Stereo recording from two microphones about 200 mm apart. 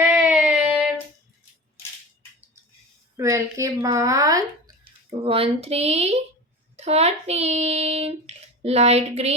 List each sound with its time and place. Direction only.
0.0 s a sound: 5° right (ahead or behind)
3.2 s speech: 15° right (ahead or behind)
5.2 s speech: 30° right (ahead or behind)